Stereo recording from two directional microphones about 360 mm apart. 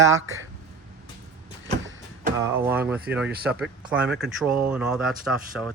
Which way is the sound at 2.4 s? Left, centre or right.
Centre.